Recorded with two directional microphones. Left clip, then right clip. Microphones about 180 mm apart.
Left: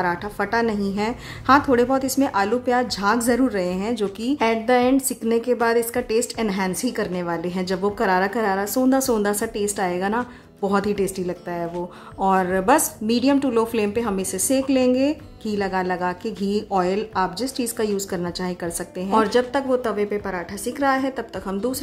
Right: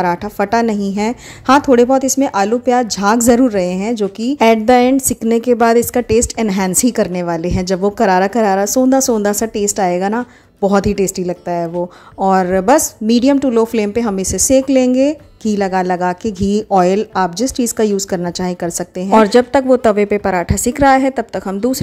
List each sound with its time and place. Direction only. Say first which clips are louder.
0.0 s a woman's voice: right 7 dB; 40° right (ahead or behind)
4.4 s a woman's voice: right 9 dB; 40° right (ahead or behind)